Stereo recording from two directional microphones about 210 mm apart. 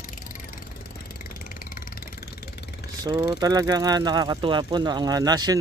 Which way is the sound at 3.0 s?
20° right (ahead or behind).